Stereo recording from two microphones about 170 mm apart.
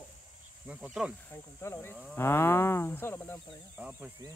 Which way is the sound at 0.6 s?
5° right (ahead or behind).